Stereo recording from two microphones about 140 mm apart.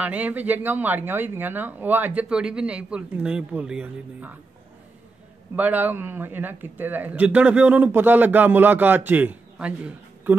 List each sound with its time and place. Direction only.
0.0 s a man's voice: 10° right (ahead or behind)
5.6 s a man's voice: 10° right (ahead or behind)